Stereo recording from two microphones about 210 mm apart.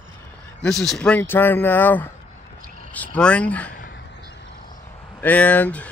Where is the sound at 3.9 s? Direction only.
55° left (ahead or behind).